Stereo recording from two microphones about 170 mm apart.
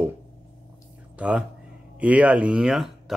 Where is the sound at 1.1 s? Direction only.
5° right (ahead or behind).